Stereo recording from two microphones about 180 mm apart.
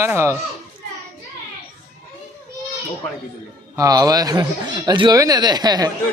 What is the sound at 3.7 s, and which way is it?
Speech, 20° right (ahead or behind).